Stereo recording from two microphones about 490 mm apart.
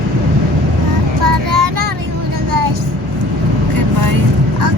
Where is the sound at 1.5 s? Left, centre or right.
Right.